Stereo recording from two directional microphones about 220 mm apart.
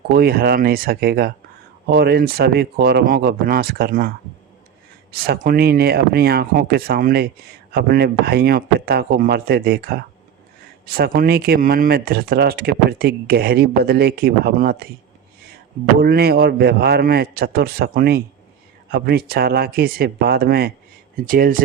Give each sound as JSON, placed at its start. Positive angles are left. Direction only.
{"t": 0.1, "sound": "speech", "side_deg": -45}
{"t": 5.1, "sound": "speech", "side_deg": -45}
{"t": 16.0, "sound": "speech", "side_deg": -45}